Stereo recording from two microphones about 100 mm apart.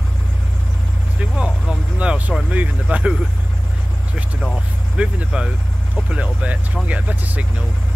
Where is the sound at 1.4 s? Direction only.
10° right (ahead or behind).